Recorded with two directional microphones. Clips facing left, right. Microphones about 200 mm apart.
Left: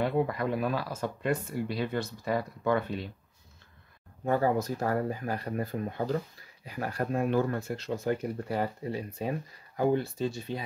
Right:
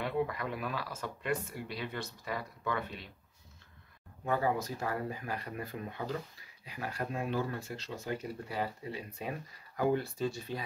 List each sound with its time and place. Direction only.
0.0 s speech: 35° left (ahead or behind)
4.3 s speech: 45° left (ahead or behind)
9.8 s speech: 25° left (ahead or behind)